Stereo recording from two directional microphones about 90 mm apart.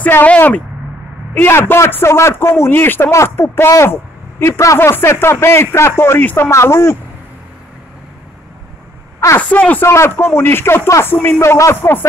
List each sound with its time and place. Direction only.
0.0 s a man's voice: 20° left (ahead or behind)
9.4 s speech: 15° left (ahead or behind)
9.8 s a man's voice: 30° left (ahead or behind)